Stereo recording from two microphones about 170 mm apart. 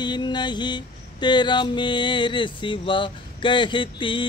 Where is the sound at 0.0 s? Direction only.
25° left (ahead or behind).